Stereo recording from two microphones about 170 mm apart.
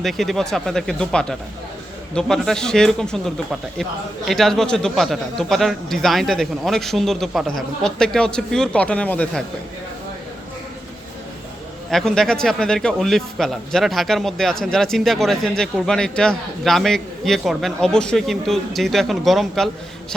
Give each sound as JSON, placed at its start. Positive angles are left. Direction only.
{"t": 0.0, "sound": "speech", "side_deg": 0}
{"t": 11.9, "sound": "speech", "side_deg": 5}